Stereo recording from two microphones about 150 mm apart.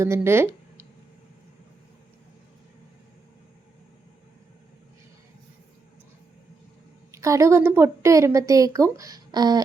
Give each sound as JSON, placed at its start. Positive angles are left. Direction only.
{"t": 0.0, "sound": "speech", "side_deg": -15}
{"t": 7.1, "sound": "a woman's voice", "side_deg": -20}